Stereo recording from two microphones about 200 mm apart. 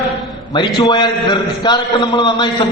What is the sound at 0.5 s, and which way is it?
A man's voice, 20° left (ahead or behind).